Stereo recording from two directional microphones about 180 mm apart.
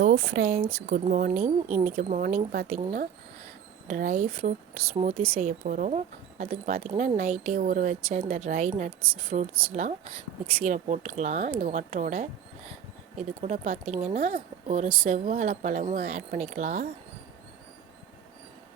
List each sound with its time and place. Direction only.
0.0 s speech: 60° right (ahead or behind)
4.9 s speech: 35° right (ahead or behind)